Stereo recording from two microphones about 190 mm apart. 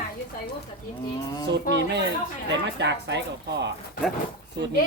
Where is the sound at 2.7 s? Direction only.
65° right (ahead or behind).